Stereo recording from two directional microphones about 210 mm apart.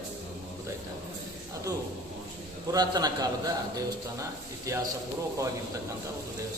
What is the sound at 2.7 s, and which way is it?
A man's voice, 20° right (ahead or behind).